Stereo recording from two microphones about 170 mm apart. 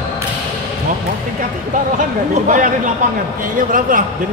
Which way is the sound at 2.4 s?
50° right (ahead or behind).